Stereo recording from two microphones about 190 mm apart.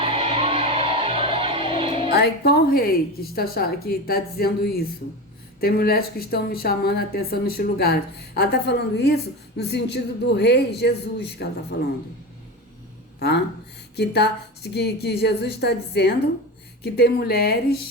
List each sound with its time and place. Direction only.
0.0 s music: 30° right (ahead or behind)
2.1 s a woman's voice: 55° left (ahead or behind)
13.1 s speech: 60° left (ahead or behind)